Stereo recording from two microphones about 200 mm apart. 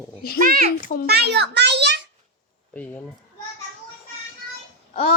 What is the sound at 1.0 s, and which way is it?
Speech, 55° right (ahead or behind).